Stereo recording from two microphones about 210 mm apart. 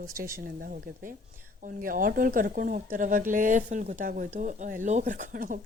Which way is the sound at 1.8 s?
40° right (ahead or behind).